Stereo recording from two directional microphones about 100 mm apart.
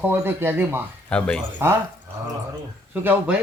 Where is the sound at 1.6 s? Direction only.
25° right (ahead or behind).